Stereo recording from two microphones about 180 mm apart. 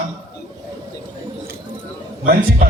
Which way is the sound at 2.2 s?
60° right (ahead or behind).